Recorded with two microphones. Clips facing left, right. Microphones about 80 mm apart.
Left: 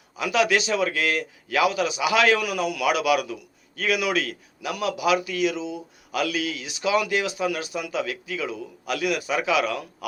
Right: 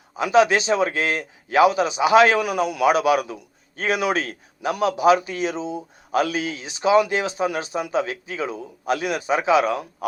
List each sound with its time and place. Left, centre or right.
0.2 s a man's voice: right